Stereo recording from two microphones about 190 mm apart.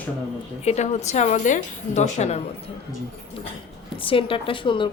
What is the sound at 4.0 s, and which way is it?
Speech, 30° left (ahead or behind).